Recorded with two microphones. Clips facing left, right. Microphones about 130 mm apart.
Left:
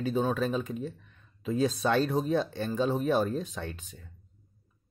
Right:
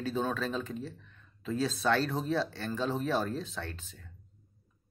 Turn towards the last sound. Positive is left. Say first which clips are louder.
# left 2 dB
turn(degrees=15)  # may be behind; listen again after turning